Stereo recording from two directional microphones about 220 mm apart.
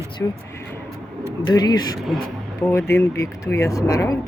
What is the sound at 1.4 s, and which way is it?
Speech, 20° left (ahead or behind).